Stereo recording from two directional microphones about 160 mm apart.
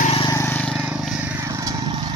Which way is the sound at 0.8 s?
5° right (ahead or behind).